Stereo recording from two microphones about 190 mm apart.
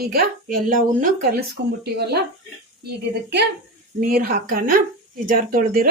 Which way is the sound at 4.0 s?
50° right (ahead or behind).